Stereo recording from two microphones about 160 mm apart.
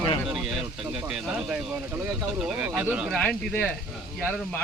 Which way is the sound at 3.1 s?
5° left (ahead or behind).